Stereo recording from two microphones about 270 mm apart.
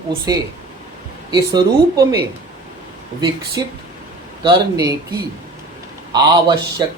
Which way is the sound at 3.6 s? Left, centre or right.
Centre.